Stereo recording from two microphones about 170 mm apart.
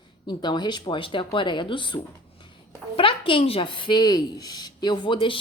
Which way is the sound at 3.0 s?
30° left (ahead or behind).